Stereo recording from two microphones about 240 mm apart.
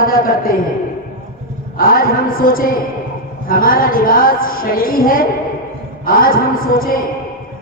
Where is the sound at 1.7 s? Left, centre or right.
Left.